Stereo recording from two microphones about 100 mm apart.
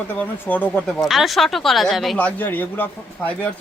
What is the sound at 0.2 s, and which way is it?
Speech, 20° left (ahead or behind).